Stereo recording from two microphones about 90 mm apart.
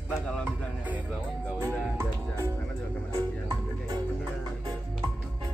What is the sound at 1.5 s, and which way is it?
Music, 30° right (ahead or behind).